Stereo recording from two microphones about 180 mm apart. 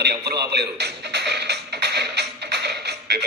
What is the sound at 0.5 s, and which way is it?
Music, 65° right (ahead or behind).